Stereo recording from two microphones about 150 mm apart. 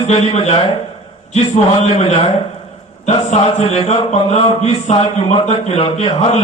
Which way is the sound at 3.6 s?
45° left (ahead or behind).